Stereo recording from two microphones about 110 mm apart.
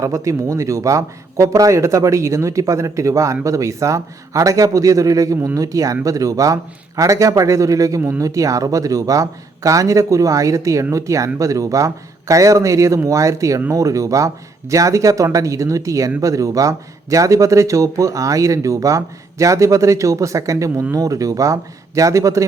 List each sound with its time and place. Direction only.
0.0 s speech: 30° right (ahead or behind)